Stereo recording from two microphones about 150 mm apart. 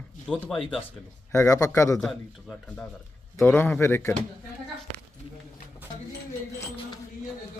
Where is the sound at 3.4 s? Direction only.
15° left (ahead or behind).